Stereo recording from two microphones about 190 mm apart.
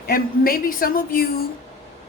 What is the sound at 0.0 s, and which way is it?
Speech, 50° left (ahead or behind).